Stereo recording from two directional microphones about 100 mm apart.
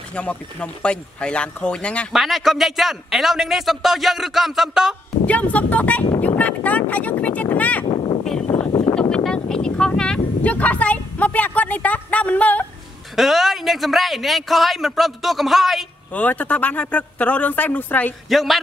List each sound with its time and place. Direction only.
0.1 s speech: 10° left (ahead or behind)
2.1 s a man's voice: centre (ahead or behind)
5.2 s speech: 15° left (ahead or behind)
7.8 s a sound: 55° left (ahead or behind)
9.1 s speech: 5° left (ahead or behind)
13.1 s a man's voice: centre (ahead or behind)
16.1 s speech: 15° left (ahead or behind)
18.3 s a man's voice: centre (ahead or behind)